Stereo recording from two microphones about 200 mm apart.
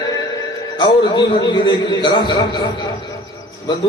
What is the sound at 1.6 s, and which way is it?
Speech, 20° left (ahead or behind).